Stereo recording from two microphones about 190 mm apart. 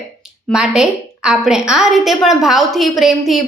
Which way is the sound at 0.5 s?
5° right (ahead or behind).